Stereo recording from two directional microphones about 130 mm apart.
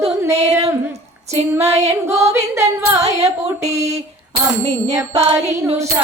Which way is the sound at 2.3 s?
20° right (ahead or behind).